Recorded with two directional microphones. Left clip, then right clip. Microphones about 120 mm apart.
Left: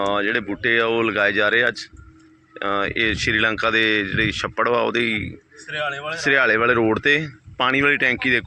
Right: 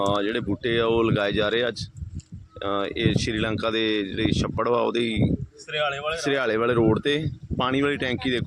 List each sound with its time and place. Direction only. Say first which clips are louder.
0.0 s speech: left 3 dB; 20° right (ahead or behind)